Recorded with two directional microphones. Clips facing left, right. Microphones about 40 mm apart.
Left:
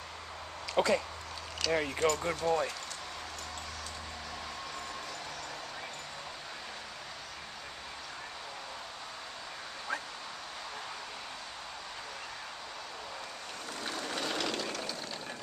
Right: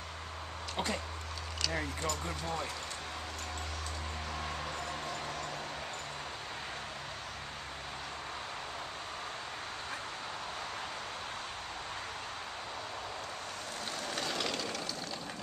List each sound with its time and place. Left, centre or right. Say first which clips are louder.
0.7 s speech: left 8 dB; left
2.2 s speech: left 7 dB; left
14.4 s vehicle: left 1 dB; centre